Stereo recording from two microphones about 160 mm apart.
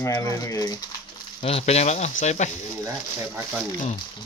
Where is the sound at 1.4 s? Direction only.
40° left (ahead or behind).